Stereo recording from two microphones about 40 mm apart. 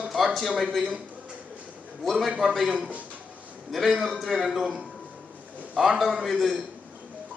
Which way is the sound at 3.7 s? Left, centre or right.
Centre.